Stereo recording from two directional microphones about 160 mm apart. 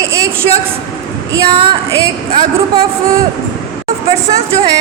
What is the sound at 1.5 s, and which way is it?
Speech, 30° right (ahead or behind).